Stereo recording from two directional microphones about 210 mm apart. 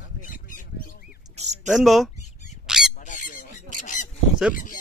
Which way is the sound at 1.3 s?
30° right (ahead or behind).